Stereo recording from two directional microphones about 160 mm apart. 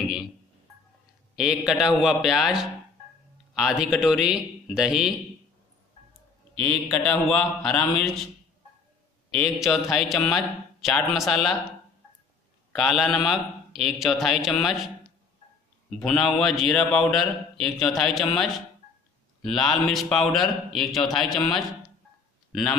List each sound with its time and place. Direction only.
0.0 s speech: 5° right (ahead or behind)
1.3 s a man's voice: 5° right (ahead or behind)
6.6 s a man's voice: 5° left (ahead or behind)
9.3 s a man's voice: centre (ahead or behind)
12.7 s a man's voice: centre (ahead or behind)
16.0 s a man's voice: 5° left (ahead or behind)
19.4 s a man's voice: centre (ahead or behind)
22.5 s speech: 5° left (ahead or behind)